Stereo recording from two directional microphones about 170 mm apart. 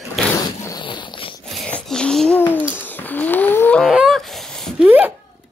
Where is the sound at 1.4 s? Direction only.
5° left (ahead or behind).